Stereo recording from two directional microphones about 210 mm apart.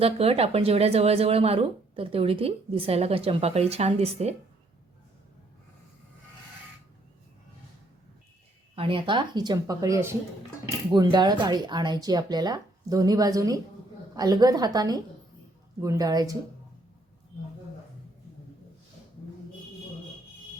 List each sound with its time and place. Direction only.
0.0 s speech: 30° right (ahead or behind)
8.7 s speech: 25° right (ahead or behind)